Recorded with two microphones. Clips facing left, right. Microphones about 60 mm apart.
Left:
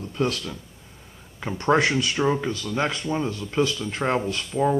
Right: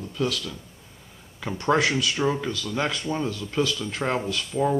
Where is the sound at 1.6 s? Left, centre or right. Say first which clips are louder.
Left 2 dB; left.